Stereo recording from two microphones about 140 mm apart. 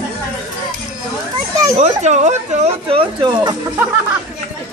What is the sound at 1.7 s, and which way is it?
Speech, 55° right (ahead or behind).